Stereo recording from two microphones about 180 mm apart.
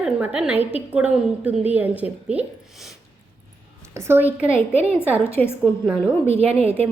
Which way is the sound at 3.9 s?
15° right (ahead or behind).